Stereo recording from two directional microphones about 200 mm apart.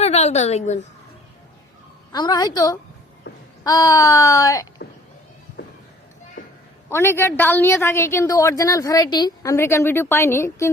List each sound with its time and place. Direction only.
0.0 s a woman's voice: 35° left (ahead or behind)
2.1 s a woman's voice: 20° left (ahead or behind)
5.6 s a sound: 55° left (ahead or behind)
6.9 s a woman's voice: 10° left (ahead or behind)